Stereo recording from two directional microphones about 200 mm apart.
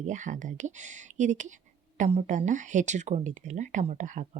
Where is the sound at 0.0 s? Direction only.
40° right (ahead or behind).